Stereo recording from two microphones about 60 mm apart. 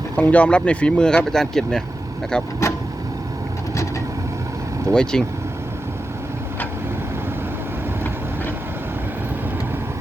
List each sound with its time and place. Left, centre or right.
0.2 s speech: left
4.9 s speech: centre